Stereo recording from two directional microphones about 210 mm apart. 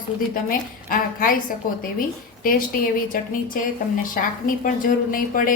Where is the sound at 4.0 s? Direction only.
40° left (ahead or behind).